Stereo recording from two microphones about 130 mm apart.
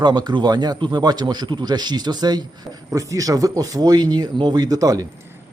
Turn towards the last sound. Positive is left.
turn(degrees=-30)  # may be behind; listen again after turning